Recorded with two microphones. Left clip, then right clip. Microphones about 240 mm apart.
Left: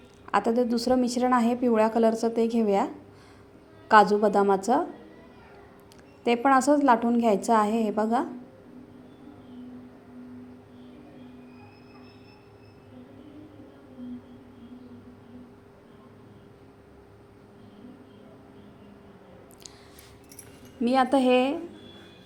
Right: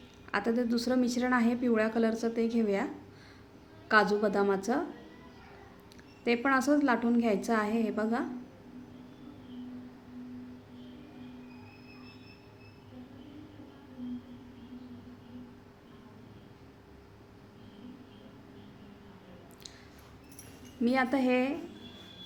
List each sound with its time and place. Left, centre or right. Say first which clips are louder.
0.3 s a woman's voice: left 7 dB; centre
6.2 s a woman's voice: left 7 dB; centre
20.8 s a woman's voice: left 7 dB; centre